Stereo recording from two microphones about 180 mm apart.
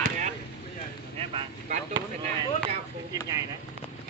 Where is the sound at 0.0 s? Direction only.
45° right (ahead or behind).